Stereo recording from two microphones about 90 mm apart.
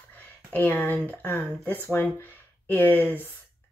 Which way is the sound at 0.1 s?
20° left (ahead or behind).